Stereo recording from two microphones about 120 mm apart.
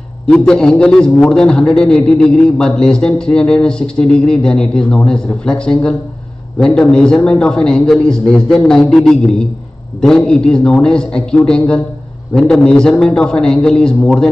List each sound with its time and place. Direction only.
0.3 s a man's voice: 5° left (ahead or behind)